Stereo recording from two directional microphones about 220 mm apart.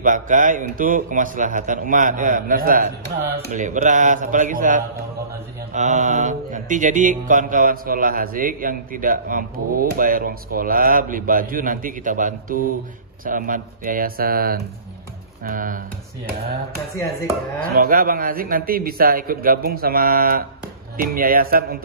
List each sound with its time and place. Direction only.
0.0 s mantra: 35° right (ahead or behind)
17.6 s mantra: 40° right (ahead or behind)